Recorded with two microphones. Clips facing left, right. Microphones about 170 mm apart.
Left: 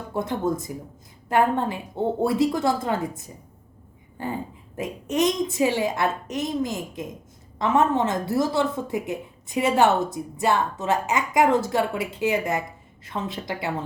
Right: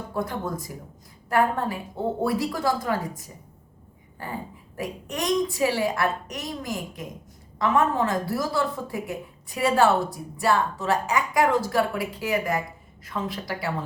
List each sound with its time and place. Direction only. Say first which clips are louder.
0.1 s a woman's voice: left 5 dB; 25° left (ahead or behind)
4.8 s a woman's voice: left 7 dB; 20° left (ahead or behind)